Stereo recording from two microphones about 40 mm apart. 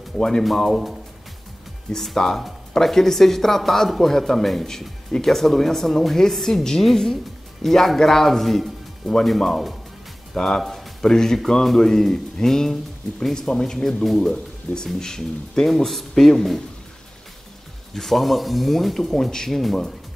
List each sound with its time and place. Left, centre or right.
0.4 s a man's voice: centre
10.3 s speech: centre
17.9 s a man's voice: centre